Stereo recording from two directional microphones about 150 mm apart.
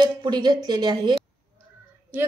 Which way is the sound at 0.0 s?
30° right (ahead or behind).